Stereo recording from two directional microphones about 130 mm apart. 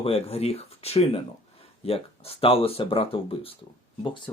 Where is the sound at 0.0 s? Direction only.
50° left (ahead or behind).